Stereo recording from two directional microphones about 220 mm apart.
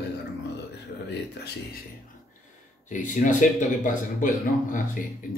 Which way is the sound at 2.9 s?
35° left (ahead or behind).